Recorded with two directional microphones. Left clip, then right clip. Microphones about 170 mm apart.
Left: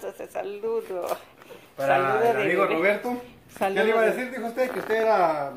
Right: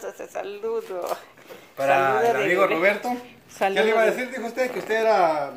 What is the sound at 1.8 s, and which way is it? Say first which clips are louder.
Speech: right 2 dB; 65° right (ahead or behind).